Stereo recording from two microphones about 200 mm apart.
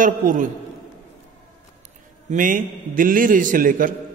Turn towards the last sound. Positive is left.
turn(degrees=-45)  # may be behind; listen again after turning